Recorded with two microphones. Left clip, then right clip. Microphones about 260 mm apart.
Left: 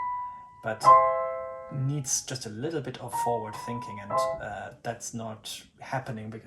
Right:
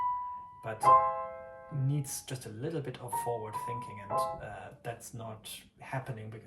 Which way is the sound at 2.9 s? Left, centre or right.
Left.